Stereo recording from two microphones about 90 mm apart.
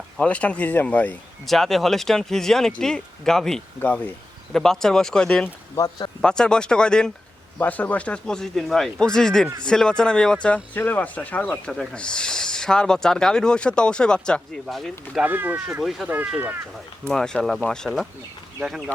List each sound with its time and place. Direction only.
0.2 s speech: 15° left (ahead or behind)
1.5 s speech: 5° left (ahead or behind)
3.8 s speech: 15° left (ahead or behind)
4.5 s speech: 5° left (ahead or behind)
5.7 s speech: 45° left (ahead or behind)
6.2 s speech: 10° left (ahead or behind)
11.7 s speech: centre (ahead or behind)
15.2 s speech: 20° right (ahead or behind)
15.8 s speech: 5° right (ahead or behind)
16.0 s speech: 20° right (ahead or behind)
17.1 s speech: 5° left (ahead or behind)